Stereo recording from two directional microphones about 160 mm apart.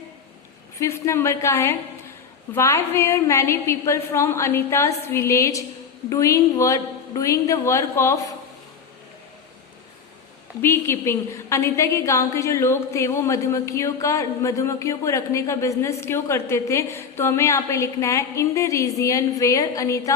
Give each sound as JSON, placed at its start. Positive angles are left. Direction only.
{"t": 0.8, "sound": "a woman's voice", "side_deg": 15}
{"t": 10.6, "sound": "a woman's voice", "side_deg": 15}